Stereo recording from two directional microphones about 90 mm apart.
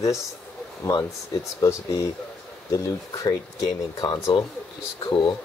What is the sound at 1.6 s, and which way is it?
Speech, 40° left (ahead or behind).